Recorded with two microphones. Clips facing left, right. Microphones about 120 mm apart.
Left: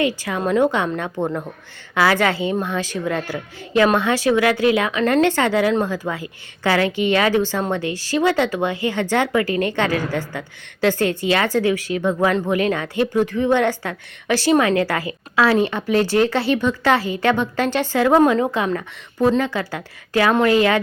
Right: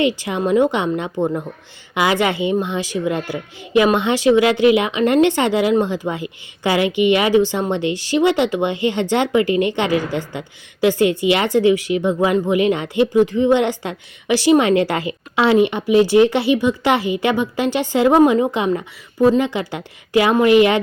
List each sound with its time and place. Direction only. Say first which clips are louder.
0.0 s a woman's voice: right 2 dB; 20° right (ahead or behind)